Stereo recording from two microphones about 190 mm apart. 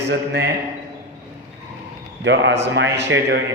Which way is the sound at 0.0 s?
60° right (ahead or behind).